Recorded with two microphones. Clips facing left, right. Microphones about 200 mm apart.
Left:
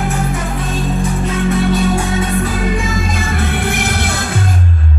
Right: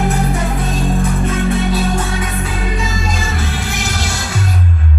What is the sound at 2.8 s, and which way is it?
Music, 55° left (ahead or behind).